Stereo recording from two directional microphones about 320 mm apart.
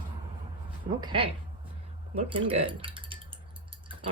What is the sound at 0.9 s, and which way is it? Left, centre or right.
A woman's voice, centre.